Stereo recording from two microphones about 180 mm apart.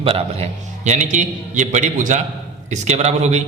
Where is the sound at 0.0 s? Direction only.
30° right (ahead or behind).